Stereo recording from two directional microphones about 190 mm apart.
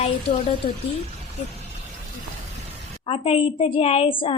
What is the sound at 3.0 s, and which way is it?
A woman's voice, 30° left (ahead or behind).